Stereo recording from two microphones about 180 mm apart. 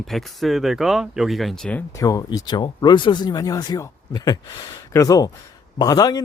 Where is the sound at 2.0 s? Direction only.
20° left (ahead or behind).